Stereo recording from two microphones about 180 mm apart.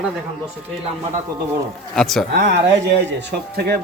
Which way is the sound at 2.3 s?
65° right (ahead or behind).